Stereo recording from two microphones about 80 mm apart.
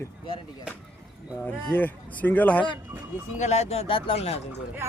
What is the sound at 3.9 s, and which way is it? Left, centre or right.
Speech, left.